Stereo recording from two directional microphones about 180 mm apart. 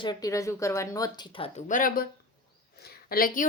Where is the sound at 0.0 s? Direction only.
20° left (ahead or behind).